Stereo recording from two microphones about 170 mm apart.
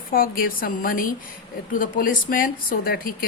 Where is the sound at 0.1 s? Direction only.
55° left (ahead or behind).